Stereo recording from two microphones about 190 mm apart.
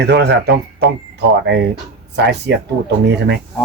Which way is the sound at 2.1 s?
65° right (ahead or behind).